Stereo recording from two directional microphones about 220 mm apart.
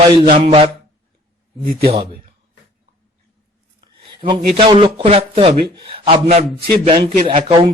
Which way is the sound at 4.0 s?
20° right (ahead or behind).